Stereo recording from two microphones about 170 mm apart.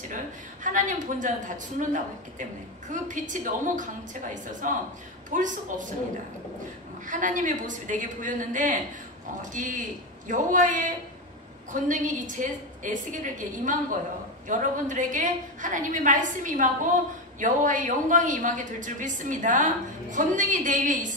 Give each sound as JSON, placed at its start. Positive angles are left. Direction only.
{"t": 0.7, "sound": "a woman's voice", "side_deg": -50}
{"t": 2.9, "sound": "a woman's voice", "side_deg": -50}
{"t": 7.1, "sound": "a woman's voice", "side_deg": -50}